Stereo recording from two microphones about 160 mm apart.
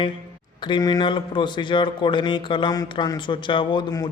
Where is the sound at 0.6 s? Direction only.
25° left (ahead or behind).